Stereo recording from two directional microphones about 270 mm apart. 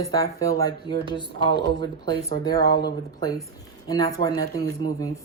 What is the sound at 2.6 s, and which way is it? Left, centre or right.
Speech, left.